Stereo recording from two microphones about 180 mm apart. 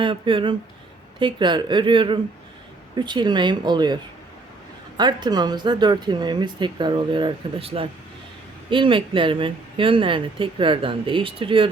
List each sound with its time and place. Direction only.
0.0 s speech: 30° right (ahead or behind)
4.9 s speech: 25° right (ahead or behind)